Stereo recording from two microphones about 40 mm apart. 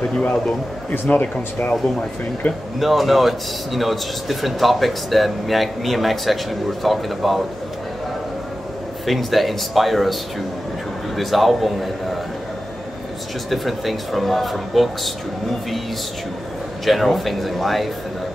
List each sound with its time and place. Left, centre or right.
1.1 s speech: left
2.4 s speech: left
2.8 s speech: centre
9.0 s speech: centre
11.1 s speech: centre
13.5 s speech: centre
16.8 s speech: centre